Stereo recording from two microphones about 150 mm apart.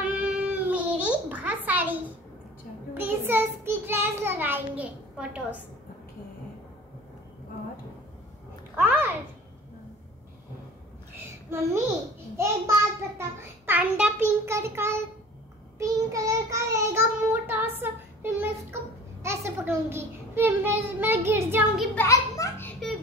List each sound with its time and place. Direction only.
0.0 s a sound: 10° right (ahead or behind)
3.0 s a child's voice: 15° right (ahead or behind)
8.7 s a child's voice: 15° right (ahead or behind)
11.2 s child singing: 15° right (ahead or behind)
13.7 s child singing: 10° right (ahead or behind)
21.9 s a child's voice: 20° left (ahead or behind)